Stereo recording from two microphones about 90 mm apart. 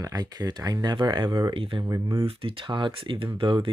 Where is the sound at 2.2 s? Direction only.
80° right.